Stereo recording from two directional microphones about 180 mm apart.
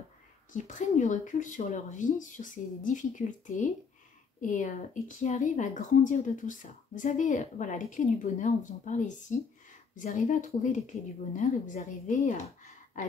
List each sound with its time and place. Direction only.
0.5 s a woman's voice: 45° left (ahead or behind)